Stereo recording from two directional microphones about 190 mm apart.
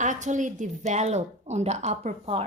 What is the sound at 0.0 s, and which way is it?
Speech, 40° right (ahead or behind).